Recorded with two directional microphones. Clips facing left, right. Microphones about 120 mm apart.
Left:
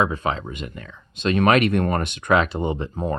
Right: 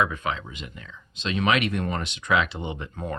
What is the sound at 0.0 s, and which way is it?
Speech, 35° left (ahead or behind).